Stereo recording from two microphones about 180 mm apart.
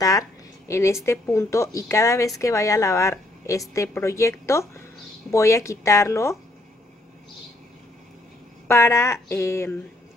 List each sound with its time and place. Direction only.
0.0 s a sound: 20° left (ahead or behind)
1.0 s speech: 15° left (ahead or behind)
8.6 s speech: 15° left (ahead or behind)